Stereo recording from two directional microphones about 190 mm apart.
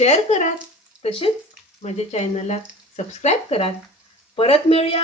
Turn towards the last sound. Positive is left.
turn(degrees=30)  # may be behind; listen again after turning